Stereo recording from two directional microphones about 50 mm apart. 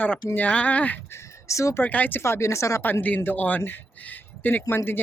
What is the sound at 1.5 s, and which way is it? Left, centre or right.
Speech, left.